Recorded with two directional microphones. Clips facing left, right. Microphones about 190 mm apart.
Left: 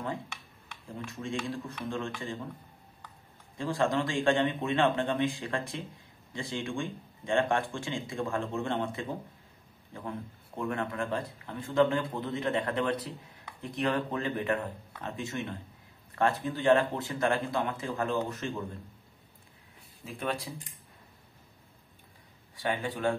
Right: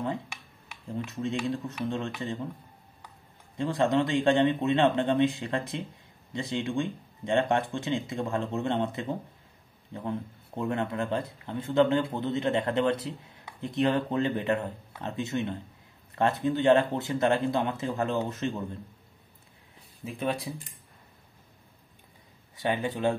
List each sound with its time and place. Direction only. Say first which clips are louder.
0.3 s speech: right 1 dB; 15° right (ahead or behind)
3.5 s speech: right 4 dB; 20° right (ahead or behind)
10.6 s speech: right 3 dB; 25° right (ahead or behind)
20.1 s speech: right 3 dB; 20° right (ahead or behind)
22.6 s speech: right 3 dB; 20° right (ahead or behind)